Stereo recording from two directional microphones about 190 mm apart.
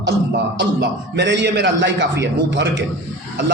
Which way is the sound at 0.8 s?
65° right (ahead or behind).